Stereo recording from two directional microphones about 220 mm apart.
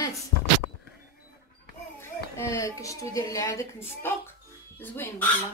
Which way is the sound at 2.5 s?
15° left (ahead or behind).